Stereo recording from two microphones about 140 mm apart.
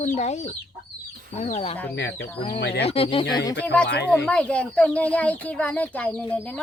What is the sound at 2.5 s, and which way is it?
Speech, 45° left (ahead or behind).